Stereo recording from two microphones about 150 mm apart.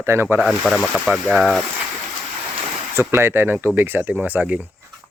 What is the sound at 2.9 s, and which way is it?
Speech, 15° right (ahead or behind).